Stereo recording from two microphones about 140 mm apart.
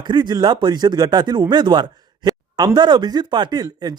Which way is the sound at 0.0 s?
30° right (ahead or behind).